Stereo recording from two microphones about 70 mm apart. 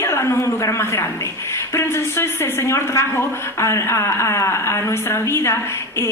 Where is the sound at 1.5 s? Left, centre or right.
Left.